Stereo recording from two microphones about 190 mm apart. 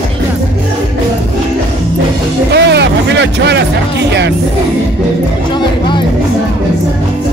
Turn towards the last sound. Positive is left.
turn(degrees=25)  # may be behind; listen again after turning